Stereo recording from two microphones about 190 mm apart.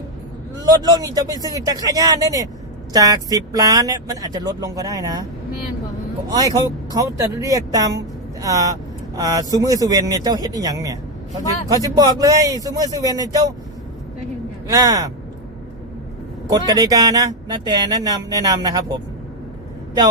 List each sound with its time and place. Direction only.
0.6 s speech: 20° right (ahead or behind)
6.3 s speech: 20° right (ahead or behind)
14.7 s speech: 20° right (ahead or behind)
16.5 s speech: 20° right (ahead or behind)